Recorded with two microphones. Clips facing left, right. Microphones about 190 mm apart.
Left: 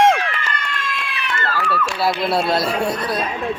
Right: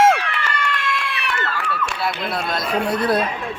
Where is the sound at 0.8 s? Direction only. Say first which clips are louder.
Right 2 dB; 65° right (ahead or behind).